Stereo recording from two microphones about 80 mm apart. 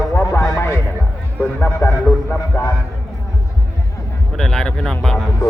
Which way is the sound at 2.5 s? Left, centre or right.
Left.